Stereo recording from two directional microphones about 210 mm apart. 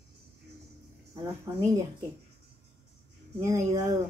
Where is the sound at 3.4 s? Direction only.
15° right (ahead or behind).